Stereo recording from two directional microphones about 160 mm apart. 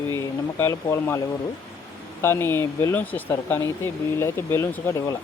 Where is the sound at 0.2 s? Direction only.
20° left (ahead or behind).